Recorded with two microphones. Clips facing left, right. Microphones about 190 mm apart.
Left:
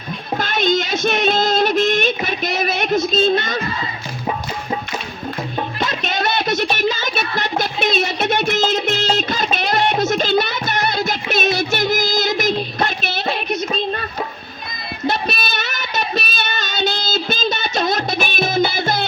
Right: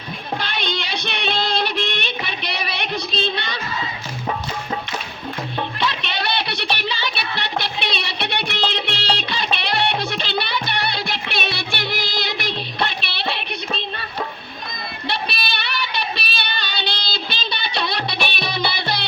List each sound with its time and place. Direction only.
0.3 s music: 45° left (ahead or behind)
5.8 s music: 45° left (ahead or behind)
15.0 s child singing: 45° left (ahead or behind)